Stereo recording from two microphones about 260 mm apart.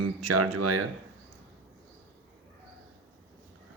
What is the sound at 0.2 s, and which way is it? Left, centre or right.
Speech, right.